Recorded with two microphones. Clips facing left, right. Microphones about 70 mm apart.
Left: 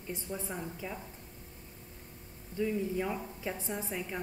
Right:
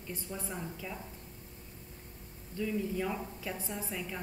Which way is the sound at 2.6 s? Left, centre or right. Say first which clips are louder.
Left 2 dB; centre.